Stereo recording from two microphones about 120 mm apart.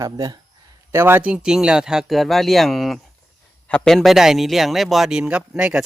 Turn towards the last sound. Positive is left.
turn(degrees=-5)  # may be behind; listen again after turning